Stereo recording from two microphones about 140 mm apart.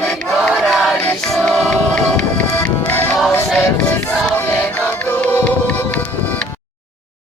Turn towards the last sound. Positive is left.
turn(degrees=10)  # may be behind; listen again after turning